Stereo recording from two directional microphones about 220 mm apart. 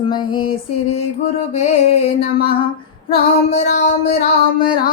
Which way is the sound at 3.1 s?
30° left (ahead or behind).